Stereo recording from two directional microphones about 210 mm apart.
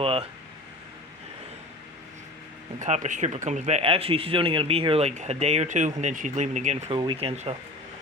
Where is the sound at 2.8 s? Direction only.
35° right (ahead or behind).